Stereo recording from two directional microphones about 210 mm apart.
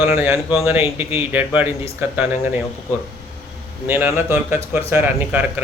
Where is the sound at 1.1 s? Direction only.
10° right (ahead or behind).